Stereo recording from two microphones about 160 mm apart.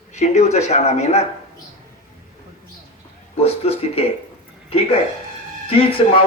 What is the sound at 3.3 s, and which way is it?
Speech, 40° left (ahead or behind).